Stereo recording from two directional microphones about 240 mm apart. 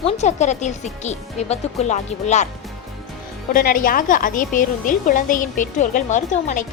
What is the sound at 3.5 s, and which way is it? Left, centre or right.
A woman's voice, left.